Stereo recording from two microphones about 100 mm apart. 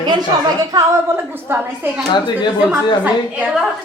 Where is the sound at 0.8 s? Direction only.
20° right (ahead or behind).